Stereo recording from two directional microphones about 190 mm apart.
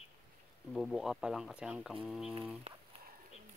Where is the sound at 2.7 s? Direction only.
30° right (ahead or behind).